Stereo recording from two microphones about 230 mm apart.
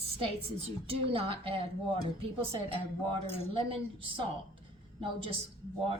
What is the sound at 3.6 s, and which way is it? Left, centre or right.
Speech, right.